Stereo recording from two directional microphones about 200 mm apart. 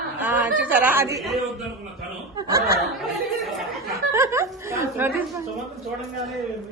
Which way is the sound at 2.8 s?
Centre (ahead or behind).